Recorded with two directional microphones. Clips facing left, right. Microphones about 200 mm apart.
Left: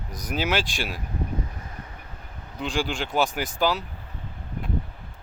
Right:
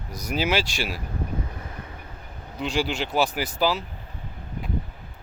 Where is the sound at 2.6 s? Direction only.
5° right (ahead or behind).